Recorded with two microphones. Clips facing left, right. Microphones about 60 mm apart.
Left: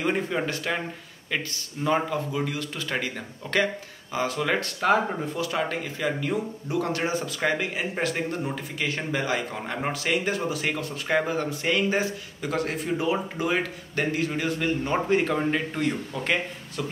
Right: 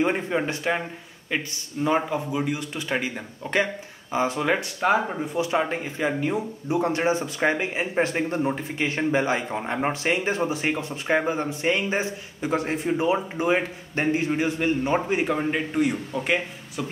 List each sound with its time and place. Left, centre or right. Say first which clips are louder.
0.0 s speech: right 2 dB; right
1.9 s speech: right 1 dB; centre